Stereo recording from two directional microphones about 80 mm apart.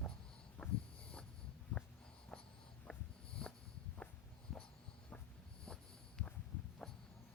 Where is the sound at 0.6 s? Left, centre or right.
Centre.